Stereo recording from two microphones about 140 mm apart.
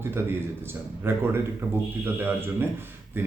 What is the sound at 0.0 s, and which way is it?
Speech, 15° right (ahead or behind).